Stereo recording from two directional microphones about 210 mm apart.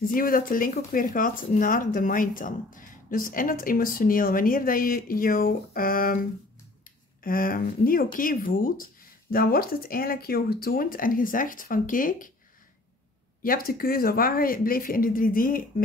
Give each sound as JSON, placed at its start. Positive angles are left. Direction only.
{"t": 0.0, "sound": "speech", "side_deg": 40}
{"t": 7.2, "sound": "speech", "side_deg": 45}
{"t": 13.4, "sound": "speech", "side_deg": 45}